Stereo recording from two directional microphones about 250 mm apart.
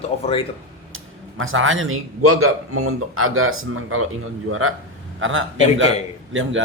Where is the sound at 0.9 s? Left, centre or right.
Right.